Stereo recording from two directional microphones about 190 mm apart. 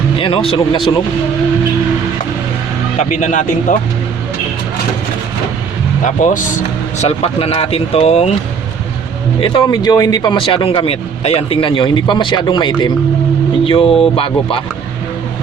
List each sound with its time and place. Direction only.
0.2 s speech: 30° left (ahead or behind)
3.0 s speech: 40° left (ahead or behind)
6.1 s speech: 40° left (ahead or behind)
7.0 s speech: 30° left (ahead or behind)
9.4 s speech: 20° left (ahead or behind)